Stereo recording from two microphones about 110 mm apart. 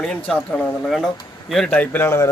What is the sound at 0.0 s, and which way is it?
Speech, 5° left (ahead or behind).